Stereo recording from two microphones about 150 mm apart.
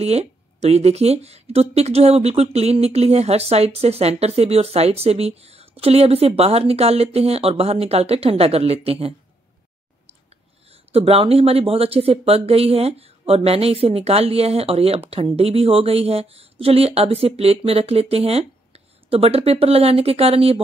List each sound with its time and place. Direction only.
0.0 s speech: 45° right (ahead or behind)
10.9 s speech: 40° right (ahead or behind)